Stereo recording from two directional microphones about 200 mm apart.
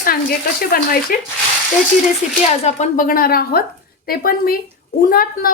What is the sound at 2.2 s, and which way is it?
Speech, 35° left (ahead or behind).